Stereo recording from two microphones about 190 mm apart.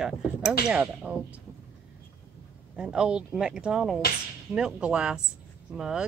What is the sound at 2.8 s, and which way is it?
Speech, 5° right (ahead or behind).